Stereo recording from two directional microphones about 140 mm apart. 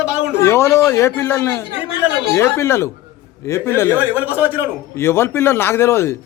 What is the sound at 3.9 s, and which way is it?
Speech, 15° right (ahead or behind).